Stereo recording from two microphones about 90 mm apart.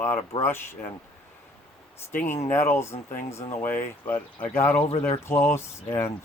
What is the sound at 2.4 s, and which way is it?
Speech, 30° left (ahead or behind).